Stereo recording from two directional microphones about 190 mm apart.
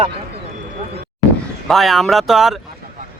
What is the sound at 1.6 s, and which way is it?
Speech, centre (ahead or behind).